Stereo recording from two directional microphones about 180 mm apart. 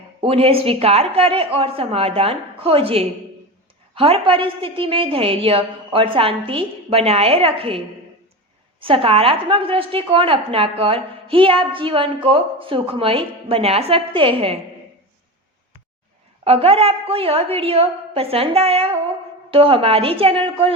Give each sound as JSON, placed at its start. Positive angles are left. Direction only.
{"t": 0.2, "sound": "a woman's voice", "side_deg": -30}
{"t": 8.8, "sound": "a woman's voice", "side_deg": -30}
{"t": 16.4, "sound": "a woman's voice", "side_deg": -35}